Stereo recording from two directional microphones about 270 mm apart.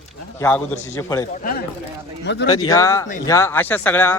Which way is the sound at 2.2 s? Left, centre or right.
Left.